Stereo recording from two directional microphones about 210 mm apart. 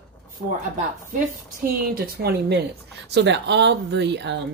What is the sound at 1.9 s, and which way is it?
A woman's voice, 50° right (ahead or behind).